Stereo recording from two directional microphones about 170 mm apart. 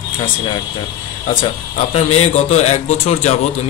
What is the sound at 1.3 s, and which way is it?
A man's voice, 35° left (ahead or behind).